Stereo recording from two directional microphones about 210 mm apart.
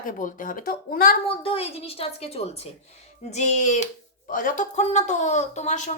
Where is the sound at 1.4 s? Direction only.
30° left (ahead or behind).